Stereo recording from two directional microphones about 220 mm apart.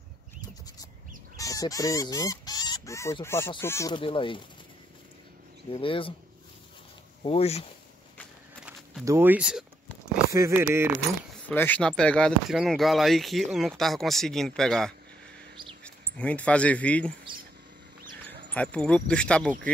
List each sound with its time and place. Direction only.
1.3 s speech: 15° left (ahead or behind)
5.7 s speech: 25° left (ahead or behind)
7.2 s speech: 25° left (ahead or behind)
9.0 s speech: 10° right (ahead or behind)
11.3 s speech: 10° left (ahead or behind)
18.5 s speech: 5° left (ahead or behind)